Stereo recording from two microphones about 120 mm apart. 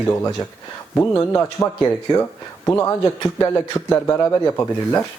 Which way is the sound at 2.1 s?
40° left (ahead or behind).